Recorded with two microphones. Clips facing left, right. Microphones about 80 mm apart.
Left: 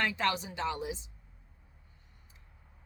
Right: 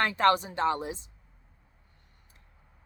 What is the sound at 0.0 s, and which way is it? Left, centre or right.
Speech, right.